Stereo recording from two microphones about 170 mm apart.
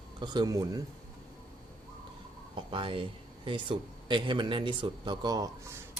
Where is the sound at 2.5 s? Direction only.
30° right (ahead or behind).